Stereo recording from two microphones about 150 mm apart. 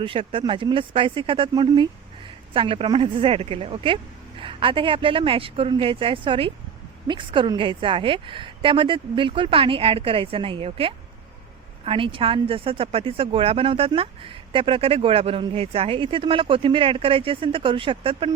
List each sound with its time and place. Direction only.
0.0 s speech: 35° right (ahead or behind)